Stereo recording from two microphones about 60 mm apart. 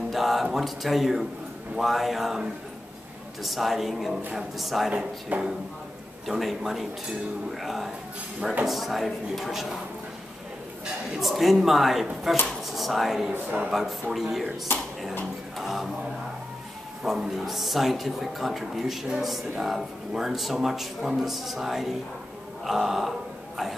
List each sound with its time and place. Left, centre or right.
0.1 s speech: centre
3.4 s speech: centre
5.3 s speech: right
6.2 s speech: centre
11.1 s speech: centre
13.3 s speech: right
13.7 s speech: centre
15.5 s music: centre
17.0 s speech: centre